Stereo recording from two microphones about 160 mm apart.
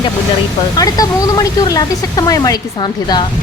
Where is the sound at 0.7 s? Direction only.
25° left (ahead or behind).